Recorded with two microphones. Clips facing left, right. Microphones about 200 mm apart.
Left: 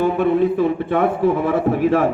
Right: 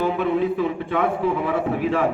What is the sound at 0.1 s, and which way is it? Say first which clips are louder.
A man's voice: left 5 dB; 60° left (ahead or behind).